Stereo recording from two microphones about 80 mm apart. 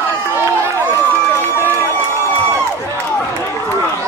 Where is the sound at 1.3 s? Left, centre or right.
Left.